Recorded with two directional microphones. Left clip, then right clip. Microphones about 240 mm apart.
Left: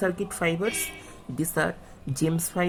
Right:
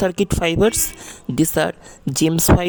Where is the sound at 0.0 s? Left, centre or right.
Right.